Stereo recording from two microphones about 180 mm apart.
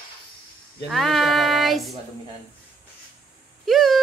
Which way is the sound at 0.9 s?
Centre (ahead or behind).